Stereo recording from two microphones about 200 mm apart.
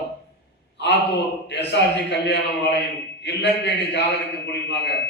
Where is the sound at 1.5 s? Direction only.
60° left (ahead or behind).